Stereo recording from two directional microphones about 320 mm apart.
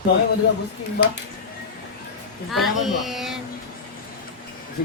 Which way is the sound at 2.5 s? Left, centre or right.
Centre.